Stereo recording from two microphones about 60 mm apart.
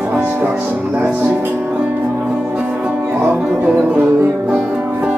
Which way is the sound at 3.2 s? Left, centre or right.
Right.